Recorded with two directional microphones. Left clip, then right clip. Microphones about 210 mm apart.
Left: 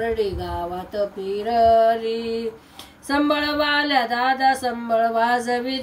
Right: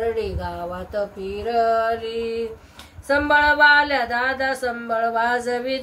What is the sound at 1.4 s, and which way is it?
Speech, 10° right (ahead or behind).